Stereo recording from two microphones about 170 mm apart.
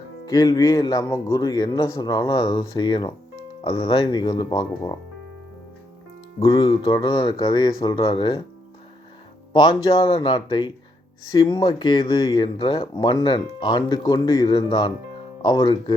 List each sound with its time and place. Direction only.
0.3 s speech: 20° left (ahead or behind)
6.4 s speech: 25° left (ahead or behind)
9.5 s speech: 25° left (ahead or behind)